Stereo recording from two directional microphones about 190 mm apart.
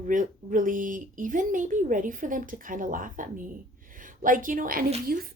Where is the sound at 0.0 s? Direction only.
45° right (ahead or behind).